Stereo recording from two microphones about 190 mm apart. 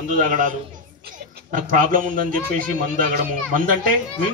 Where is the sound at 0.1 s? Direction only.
45° right (ahead or behind).